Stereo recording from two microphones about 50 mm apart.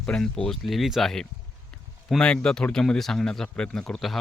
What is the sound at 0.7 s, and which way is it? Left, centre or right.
Speech, centre.